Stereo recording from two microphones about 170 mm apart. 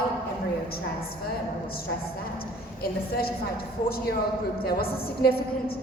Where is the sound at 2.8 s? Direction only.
65° left (ahead or behind).